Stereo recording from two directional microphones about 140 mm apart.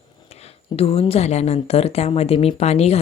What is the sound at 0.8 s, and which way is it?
Speech, 45° left (ahead or behind).